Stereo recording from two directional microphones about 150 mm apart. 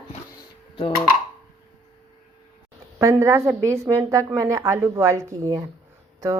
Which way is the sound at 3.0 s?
20° right (ahead or behind).